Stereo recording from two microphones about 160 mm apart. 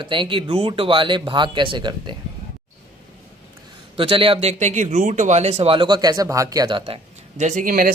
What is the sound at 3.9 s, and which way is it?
Speech, 35° right (ahead or behind).